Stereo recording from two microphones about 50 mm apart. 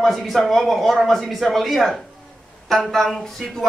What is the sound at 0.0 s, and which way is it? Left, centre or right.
Speech, centre.